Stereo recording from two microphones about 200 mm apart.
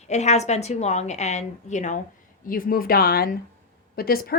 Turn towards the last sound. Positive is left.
turn(degrees=50)  # may be behind; listen again after turning